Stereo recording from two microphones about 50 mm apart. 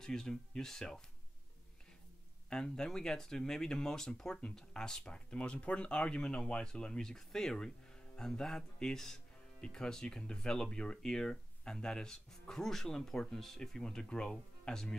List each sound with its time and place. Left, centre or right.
0.0 s speech: centre
2.5 s speech: centre